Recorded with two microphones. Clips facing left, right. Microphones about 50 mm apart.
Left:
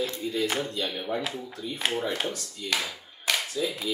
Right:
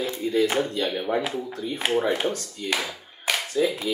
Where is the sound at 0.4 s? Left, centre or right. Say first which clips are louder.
Right 6 dB; centre.